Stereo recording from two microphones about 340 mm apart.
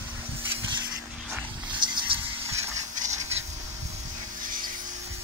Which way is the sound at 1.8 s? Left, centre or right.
Centre.